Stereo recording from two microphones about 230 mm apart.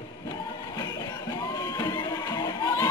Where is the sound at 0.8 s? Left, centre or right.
Centre.